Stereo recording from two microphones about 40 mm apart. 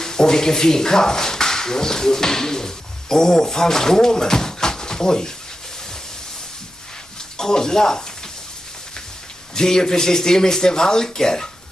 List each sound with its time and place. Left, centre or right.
0.0 s speech: centre
7.3 s speech: centre
9.6 s speech: centre